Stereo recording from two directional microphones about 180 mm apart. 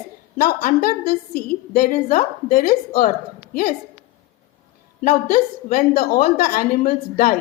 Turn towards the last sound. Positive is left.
turn(degrees=55)  # may be behind; listen again after turning